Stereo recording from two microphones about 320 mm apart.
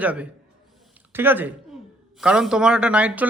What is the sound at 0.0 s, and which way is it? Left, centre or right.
A man's voice, centre.